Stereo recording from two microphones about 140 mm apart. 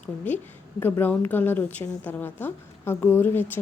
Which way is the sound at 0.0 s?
15° left (ahead or behind).